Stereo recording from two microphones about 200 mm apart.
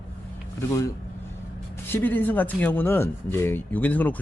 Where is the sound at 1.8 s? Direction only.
10° left (ahead or behind).